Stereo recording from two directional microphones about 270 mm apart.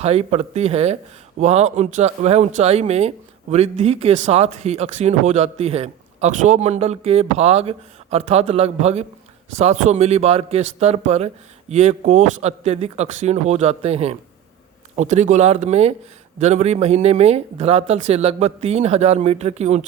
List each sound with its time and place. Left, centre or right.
0.0 s speech: right